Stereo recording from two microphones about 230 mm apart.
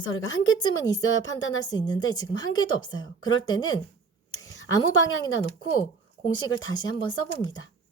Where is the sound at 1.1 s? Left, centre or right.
Left.